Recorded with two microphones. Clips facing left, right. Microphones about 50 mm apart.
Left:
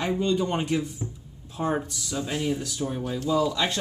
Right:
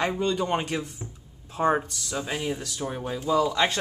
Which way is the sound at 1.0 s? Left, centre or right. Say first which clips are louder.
Left 5 dB; centre.